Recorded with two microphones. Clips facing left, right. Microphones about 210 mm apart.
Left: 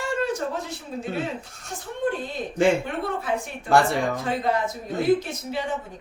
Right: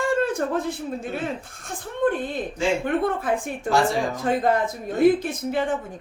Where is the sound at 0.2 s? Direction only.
50° right (ahead or behind).